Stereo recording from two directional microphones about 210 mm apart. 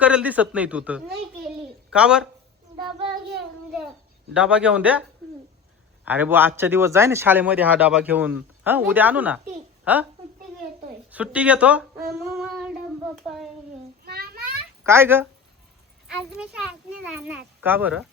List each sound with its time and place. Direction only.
0.0 s a child's voice: 5° right (ahead or behind)
4.4 s a child's voice: 5° right (ahead or behind)
6.1 s a woman's voice: 10° right (ahead or behind)
11.1 s speech: 5° right (ahead or behind)
12.3 s child singing: centre (ahead or behind)
13.2 s a child's voice: centre (ahead or behind)
14.0 s a sound: 45° right (ahead or behind)
14.8 s speech: 10° right (ahead or behind)
16.9 s a child's voice: 5° right (ahead or behind)